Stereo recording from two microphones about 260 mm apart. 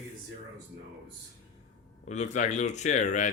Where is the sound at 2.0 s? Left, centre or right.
Left.